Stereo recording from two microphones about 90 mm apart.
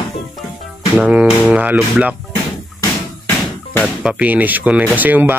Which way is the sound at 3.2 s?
25° left (ahead or behind).